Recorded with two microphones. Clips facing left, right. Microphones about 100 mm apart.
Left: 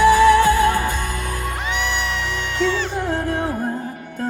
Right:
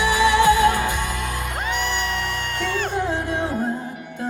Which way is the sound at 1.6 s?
40° right (ahead or behind).